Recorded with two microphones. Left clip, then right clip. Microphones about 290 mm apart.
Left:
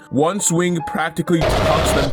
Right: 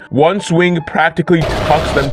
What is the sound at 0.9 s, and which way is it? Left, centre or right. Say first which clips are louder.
Speech: right 9 dB; left.